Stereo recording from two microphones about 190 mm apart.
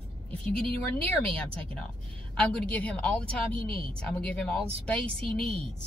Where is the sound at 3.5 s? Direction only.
30° right (ahead or behind).